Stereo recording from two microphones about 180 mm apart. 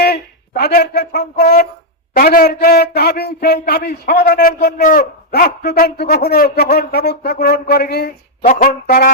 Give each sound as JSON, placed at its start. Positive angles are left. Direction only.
{"t": 0.0, "sound": "a man's voice", "side_deg": 60}